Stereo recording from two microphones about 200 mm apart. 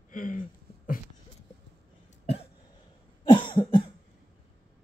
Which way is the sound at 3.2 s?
20° left (ahead or behind).